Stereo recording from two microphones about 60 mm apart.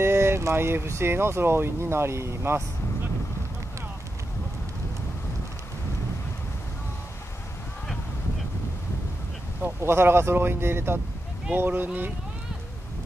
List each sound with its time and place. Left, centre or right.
0.0 s speech: right
9.8 s speech: right